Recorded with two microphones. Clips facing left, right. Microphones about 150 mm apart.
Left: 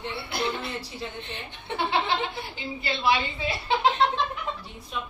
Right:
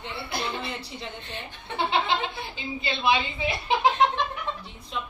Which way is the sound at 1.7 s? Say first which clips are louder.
Right 1 dB; 20° right (ahead or behind).